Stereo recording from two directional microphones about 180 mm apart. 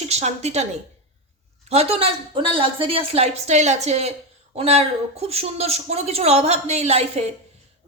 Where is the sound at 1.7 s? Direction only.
35° right (ahead or behind).